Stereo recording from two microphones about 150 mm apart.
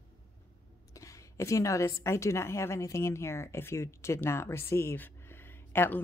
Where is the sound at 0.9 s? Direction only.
20° left (ahead or behind).